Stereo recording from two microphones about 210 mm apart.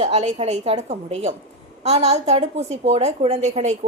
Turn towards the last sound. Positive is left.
turn(degrees=-35)  # may be behind; listen again after turning